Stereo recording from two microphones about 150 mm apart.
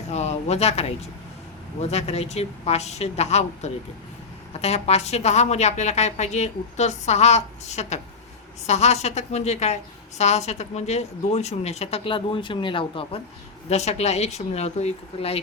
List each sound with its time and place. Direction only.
0.1 s a woman's voice: 50° left (ahead or behind)
13.7 s a woman's voice: 45° left (ahead or behind)